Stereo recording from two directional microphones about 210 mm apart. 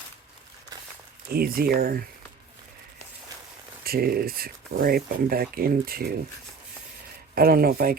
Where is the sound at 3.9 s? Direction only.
45° right (ahead or behind).